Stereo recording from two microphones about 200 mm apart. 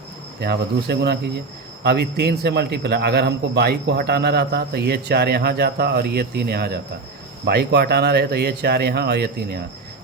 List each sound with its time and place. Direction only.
0.3 s a man's voice: 55° right (ahead or behind)